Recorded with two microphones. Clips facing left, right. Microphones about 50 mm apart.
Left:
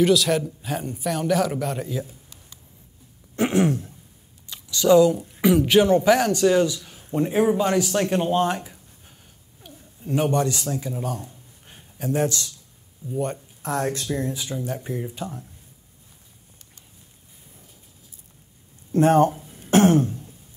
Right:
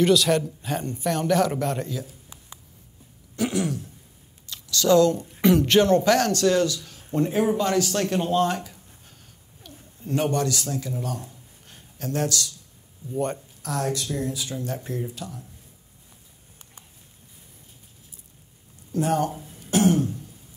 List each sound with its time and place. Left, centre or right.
0.0 s speech: centre
3.3 s throat clearing: left
4.5 s a man's voice: centre
9.6 s a sound: centre
10.4 s a man's voice: centre
11.1 s a sound: left
13.1 s speech: centre
13.6 s a sound: left
14.0 s a man's voice: centre
14.5 s a man's voice: centre
15.1 s a man's voice: left
18.9 s speech: left
19.6 s throat clearing: left